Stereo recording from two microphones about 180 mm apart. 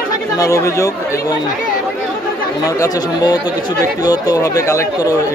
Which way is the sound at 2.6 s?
20° left (ahead or behind).